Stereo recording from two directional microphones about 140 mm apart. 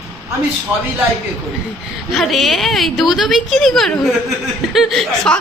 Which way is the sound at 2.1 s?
Centre (ahead or behind).